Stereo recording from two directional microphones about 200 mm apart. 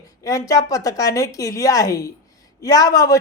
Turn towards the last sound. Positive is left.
turn(degrees=15)  # may be behind; listen again after turning